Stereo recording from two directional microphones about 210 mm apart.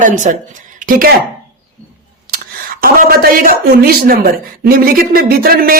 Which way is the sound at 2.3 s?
45° right (ahead or behind).